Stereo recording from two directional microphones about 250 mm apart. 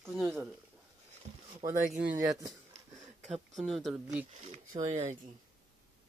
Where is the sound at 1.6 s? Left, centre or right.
Centre.